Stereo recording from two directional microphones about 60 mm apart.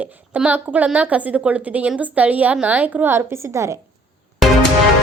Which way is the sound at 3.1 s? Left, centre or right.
Right.